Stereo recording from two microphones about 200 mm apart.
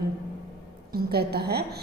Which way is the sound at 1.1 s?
50° right (ahead or behind).